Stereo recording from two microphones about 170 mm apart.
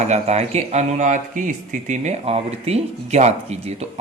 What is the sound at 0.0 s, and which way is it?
Speech, 40° right (ahead or behind).